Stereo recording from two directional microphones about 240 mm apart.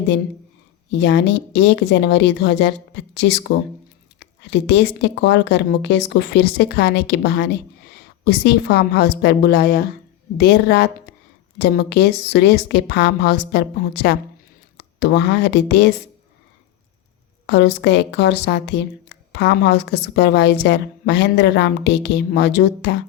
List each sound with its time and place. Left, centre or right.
0.9 s a woman's voice: left
11.1 s a sound: left
11.5 s a woman's voice: left
17.4 s a woman's voice: left